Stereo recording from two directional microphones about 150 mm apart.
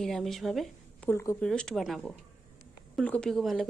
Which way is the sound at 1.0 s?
15° left (ahead or behind).